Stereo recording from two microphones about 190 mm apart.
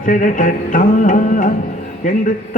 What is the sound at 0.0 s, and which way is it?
Music, 40° left (ahead or behind).